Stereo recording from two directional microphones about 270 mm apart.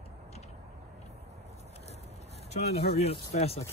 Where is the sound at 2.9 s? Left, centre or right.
Left.